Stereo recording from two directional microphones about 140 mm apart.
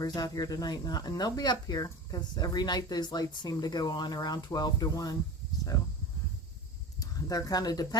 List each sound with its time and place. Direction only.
0.0 s speech: 25° left (ahead or behind)
7.0 s speech: 25° left (ahead or behind)